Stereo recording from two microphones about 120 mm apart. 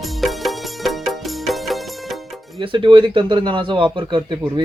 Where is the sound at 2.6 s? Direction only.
45° right (ahead or behind).